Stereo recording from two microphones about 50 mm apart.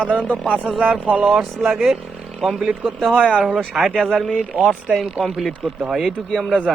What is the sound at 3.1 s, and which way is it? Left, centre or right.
Speech, left.